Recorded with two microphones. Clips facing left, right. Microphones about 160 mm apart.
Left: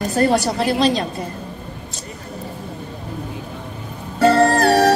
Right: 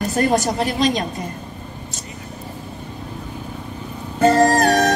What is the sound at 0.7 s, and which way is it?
Speech, 35° left (ahead or behind).